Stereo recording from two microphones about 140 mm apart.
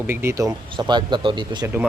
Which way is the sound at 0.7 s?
30° right (ahead or behind).